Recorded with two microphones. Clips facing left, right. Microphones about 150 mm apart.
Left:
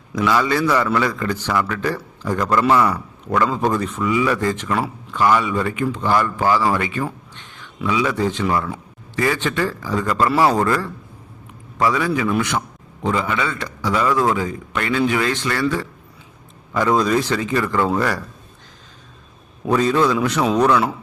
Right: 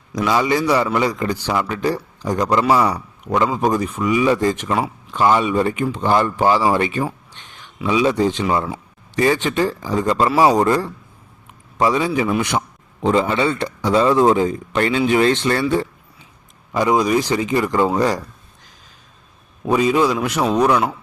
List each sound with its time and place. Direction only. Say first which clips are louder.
0.3 s a man's voice: right 1 dB; 20° right (ahead or behind)
7.3 s a sound: left 1 dB; 20° right (ahead or behind)
7.9 s a man's voice: right 3 dB; 20° right (ahead or behind)
16.7 s a man's voice: right 1 dB; 15° right (ahead or behind)
19.6 s a man's voice: right 1 dB; 10° right (ahead or behind)